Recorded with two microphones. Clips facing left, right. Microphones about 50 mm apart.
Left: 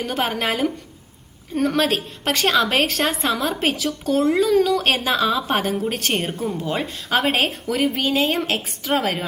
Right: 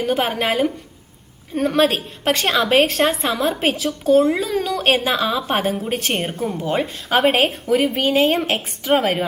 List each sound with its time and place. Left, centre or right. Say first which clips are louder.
0.0 s a woman's voice: right 3 dB; centre